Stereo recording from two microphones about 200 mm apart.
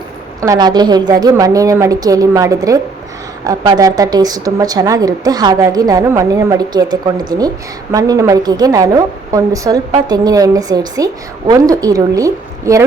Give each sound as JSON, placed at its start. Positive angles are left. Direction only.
{"t": 0.4, "sound": "a woman's voice", "side_deg": -20}